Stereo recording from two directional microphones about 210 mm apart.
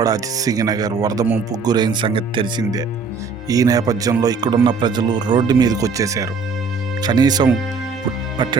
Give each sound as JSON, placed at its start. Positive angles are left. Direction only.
{"t": 0.0, "sound": "speech", "side_deg": -15}